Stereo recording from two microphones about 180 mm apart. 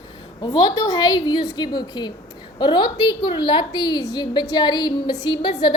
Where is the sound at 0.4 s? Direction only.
25° left (ahead or behind).